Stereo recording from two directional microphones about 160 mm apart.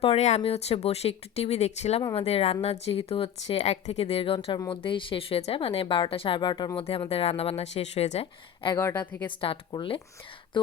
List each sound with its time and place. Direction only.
0.0 s speech: 40° left (ahead or behind)
8.7 s a woman's voice: 15° left (ahead or behind)
9.4 s speech: 35° left (ahead or behind)